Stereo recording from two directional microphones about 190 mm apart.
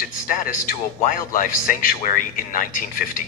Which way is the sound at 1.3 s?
45° left (ahead or behind).